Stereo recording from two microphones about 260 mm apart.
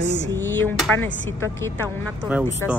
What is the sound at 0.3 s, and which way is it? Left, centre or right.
Speech, centre.